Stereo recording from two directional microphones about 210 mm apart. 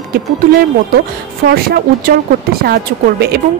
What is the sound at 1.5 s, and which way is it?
Speech, 45° right (ahead or behind).